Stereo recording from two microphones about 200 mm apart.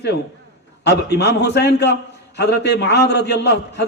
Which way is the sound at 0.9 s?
55° left (ahead or behind).